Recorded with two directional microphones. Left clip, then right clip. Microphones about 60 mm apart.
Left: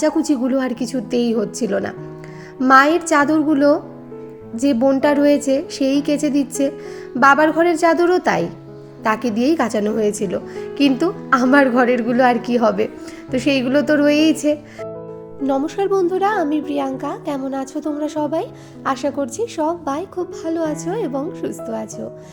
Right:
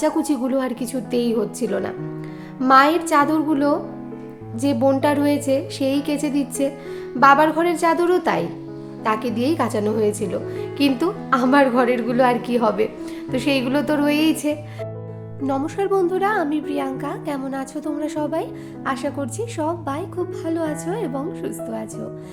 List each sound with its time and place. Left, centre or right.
0.0 s a woman's voice: centre
0.5 s a woman's voice: left
14.0 s a woman's voice: left
15.9 s a woman's voice: centre
18.9 s a woman's voice: left